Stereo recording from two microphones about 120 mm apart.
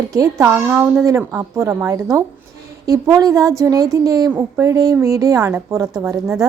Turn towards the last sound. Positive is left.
turn(degrees=-25)  # may be behind; listen again after turning